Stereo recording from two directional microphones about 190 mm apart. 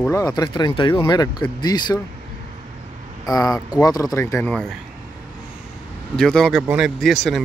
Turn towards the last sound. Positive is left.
turn(degrees=0)  # may be behind; listen again after turning